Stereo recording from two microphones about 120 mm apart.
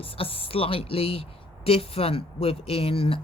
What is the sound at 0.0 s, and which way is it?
Speech, 50° left (ahead or behind).